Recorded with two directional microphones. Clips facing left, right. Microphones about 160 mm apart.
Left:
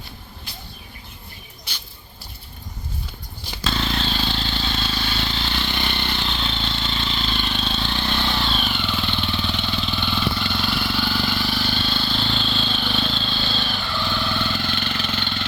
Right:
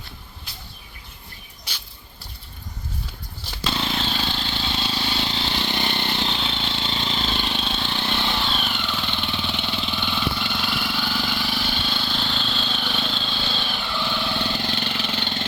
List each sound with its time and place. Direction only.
3.7 s vehicle: 15° right (ahead or behind)
4.1 s vehicle: 5° right (ahead or behind)
4.5 s vehicle: 15° right (ahead or behind)
6.4 s vehicle: 15° right (ahead or behind)
6.8 s vehicle: 25° right (ahead or behind)
7.5 s vehicle: 10° right (ahead or behind); by 15.3 s 25° right (ahead or behind)